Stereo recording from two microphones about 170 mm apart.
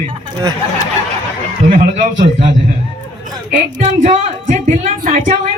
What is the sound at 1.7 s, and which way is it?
Speech, 45° right (ahead or behind).